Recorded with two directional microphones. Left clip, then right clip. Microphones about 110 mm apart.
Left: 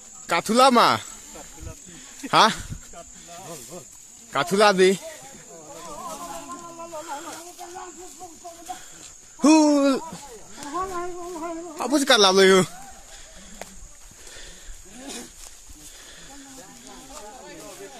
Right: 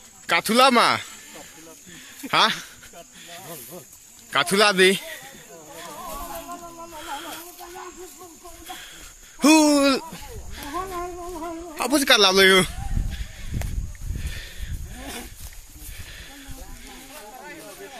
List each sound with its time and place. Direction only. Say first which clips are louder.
0.3 s speech: even; 10° left (ahead or behind)
0.7 s speech: left 1 dB; 25° left (ahead or behind)
2.2 s speech: left 2 dB; 35° left (ahead or behind)
3.3 s snake: even; 15° left (ahead or behind)
4.3 s a man's voice: even; 5° left (ahead or behind)
7.0 s snake: right 1 dB; 15° left (ahead or behind)
9.4 s speech: right 1 dB; 5° left (ahead or behind)
10.7 s a sound: left 1 dB; 20° right (ahead or behind)
11.7 s a sound: right 1 dB; 5° left (ahead or behind)
12.0 s speech: even; 30° left (ahead or behind)